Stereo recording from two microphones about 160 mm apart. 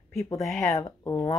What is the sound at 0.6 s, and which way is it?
Speech, 20° left (ahead or behind).